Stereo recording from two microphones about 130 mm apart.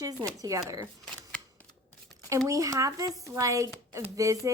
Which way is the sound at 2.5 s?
25° right (ahead or behind).